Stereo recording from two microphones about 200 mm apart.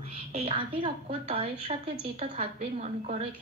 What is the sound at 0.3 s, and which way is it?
A woman's voice, 30° right (ahead or behind).